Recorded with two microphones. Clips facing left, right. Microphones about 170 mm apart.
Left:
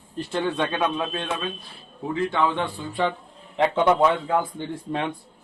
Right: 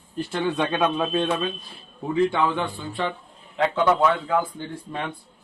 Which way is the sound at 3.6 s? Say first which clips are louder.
Left 1 dB; 20° left (ahead or behind).